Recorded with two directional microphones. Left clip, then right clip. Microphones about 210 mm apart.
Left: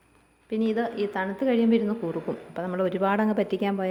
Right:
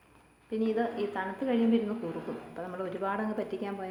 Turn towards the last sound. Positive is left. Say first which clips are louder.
# left 9 dB
turn(degrees=50)  # may be behind; listen again after turning